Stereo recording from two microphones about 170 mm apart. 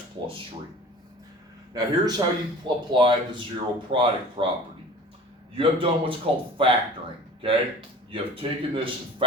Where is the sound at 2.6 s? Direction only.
25° right (ahead or behind).